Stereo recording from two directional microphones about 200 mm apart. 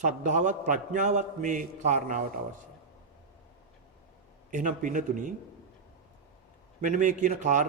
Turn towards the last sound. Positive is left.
turn(degrees=-40)  # may be behind; listen again after turning